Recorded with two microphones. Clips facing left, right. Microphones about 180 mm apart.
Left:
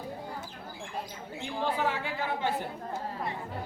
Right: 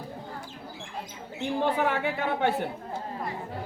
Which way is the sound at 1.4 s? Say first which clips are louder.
Right 5 dB; 60° right (ahead or behind).